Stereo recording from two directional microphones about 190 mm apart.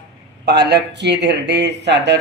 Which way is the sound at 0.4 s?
60° right (ahead or behind).